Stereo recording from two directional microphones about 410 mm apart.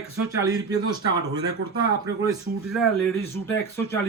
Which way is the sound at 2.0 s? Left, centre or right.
Centre.